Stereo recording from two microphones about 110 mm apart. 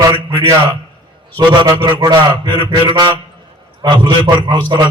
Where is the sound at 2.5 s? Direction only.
45° right (ahead or behind).